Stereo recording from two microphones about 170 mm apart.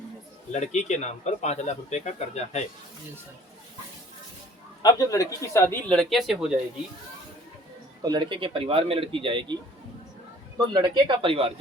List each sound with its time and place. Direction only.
0.5 s speech: 45° left (ahead or behind)
4.8 s speech: 20° left (ahead or behind); by 6.6 s centre (ahead or behind)
8.0 s speech: 25° right (ahead or behind)
10.7 s speech: 25° right (ahead or behind)